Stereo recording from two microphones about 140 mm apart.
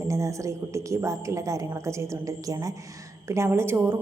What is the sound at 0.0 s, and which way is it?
A woman's voice, 20° right (ahead or behind).